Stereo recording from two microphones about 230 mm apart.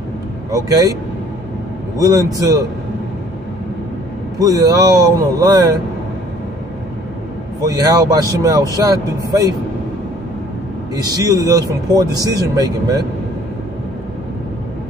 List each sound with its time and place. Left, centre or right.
0.5 s speech: centre
2.0 s speech: centre
4.4 s speech: centre
7.6 s speech: centre
11.0 s speech: centre